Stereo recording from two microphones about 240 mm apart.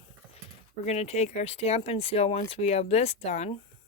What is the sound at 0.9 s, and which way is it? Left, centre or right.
Speech, left.